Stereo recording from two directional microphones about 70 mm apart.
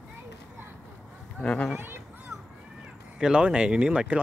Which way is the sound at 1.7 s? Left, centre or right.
Right.